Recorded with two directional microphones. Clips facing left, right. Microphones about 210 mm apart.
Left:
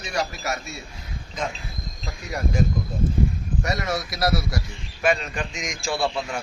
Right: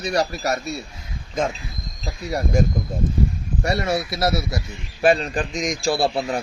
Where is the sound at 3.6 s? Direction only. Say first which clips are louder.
Right 6 dB; 30° right (ahead or behind).